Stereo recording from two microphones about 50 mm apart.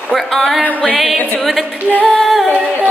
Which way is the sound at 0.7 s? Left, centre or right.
Left.